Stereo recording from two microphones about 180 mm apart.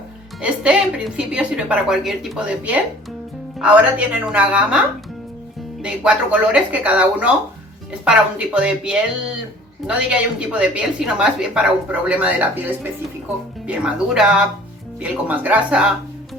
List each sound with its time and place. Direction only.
0.4 s a woman's voice: 5° right (ahead or behind)
5.8 s a woman's voice: 5° right (ahead or behind)
13.7 s a woman's voice: 5° right (ahead or behind)